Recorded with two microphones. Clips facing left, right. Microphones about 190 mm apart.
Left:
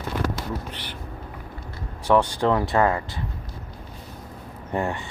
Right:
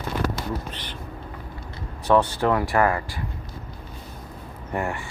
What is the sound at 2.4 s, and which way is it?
Speech, 20° left (ahead or behind).